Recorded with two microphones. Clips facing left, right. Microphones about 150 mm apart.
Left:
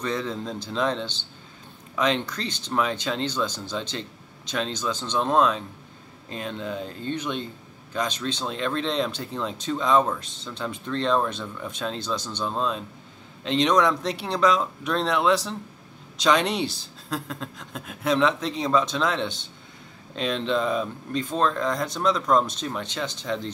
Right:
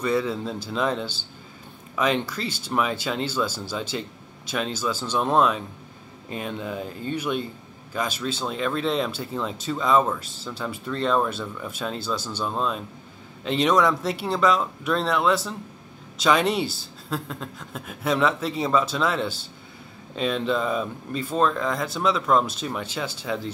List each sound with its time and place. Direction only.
0.0 s speech: 5° right (ahead or behind)